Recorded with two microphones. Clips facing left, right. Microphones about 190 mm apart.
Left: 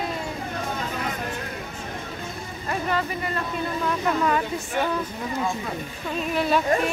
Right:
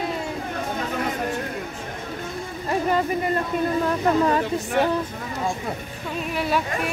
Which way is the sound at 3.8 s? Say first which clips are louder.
Right 1 dB; 35° right (ahead or behind).